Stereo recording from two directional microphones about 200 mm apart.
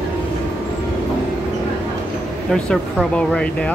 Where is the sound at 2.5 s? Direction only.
5° left (ahead or behind).